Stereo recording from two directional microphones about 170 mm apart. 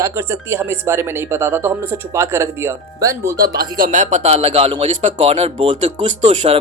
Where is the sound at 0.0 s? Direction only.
15° right (ahead or behind).